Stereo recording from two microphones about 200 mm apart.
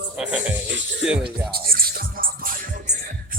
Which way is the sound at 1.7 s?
45° right (ahead or behind).